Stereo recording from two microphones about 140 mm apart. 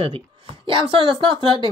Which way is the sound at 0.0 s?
40° right (ahead or behind).